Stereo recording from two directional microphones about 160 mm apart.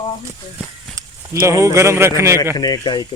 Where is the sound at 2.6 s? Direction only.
25° left (ahead or behind).